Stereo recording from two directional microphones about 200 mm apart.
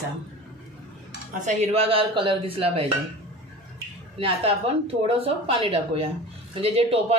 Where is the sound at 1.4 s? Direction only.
35° right (ahead or behind).